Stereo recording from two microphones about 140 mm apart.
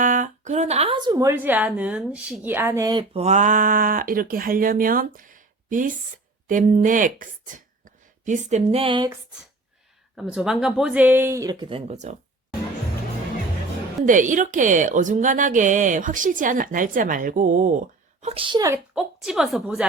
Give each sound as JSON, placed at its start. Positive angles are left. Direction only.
{"t": 0.0, "sound": "a sound", "side_deg": -65}
{"t": 0.9, "sound": "a woman's voice", "side_deg": -30}
{"t": 3.0, "sound": "a woman's voice", "side_deg": -45}
{"t": 10.2, "sound": "a woman's voice", "side_deg": -5}
{"t": 14.0, "sound": "a woman's voice", "side_deg": -65}
{"t": 18.9, "sound": "a woman's voice", "side_deg": -5}